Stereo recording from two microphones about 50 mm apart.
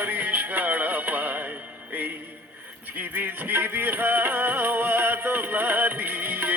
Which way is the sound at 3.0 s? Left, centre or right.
Right.